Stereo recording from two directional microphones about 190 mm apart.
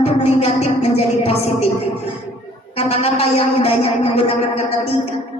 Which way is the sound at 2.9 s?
30° left (ahead or behind).